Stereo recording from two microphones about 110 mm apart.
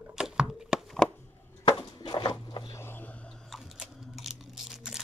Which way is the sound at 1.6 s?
35° left (ahead or behind).